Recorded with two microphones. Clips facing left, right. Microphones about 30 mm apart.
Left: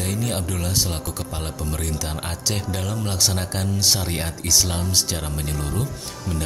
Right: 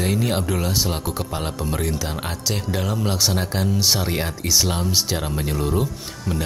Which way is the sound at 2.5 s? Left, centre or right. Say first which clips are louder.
Right 3 dB; centre.